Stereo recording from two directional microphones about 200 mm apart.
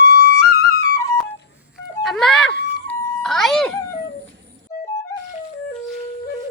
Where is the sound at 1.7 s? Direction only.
Centre (ahead or behind).